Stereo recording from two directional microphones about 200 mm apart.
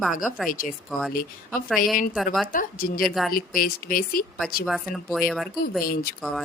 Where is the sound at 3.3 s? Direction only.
45° left (ahead or behind).